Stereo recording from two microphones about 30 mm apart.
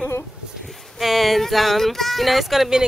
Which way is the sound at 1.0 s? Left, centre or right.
Centre.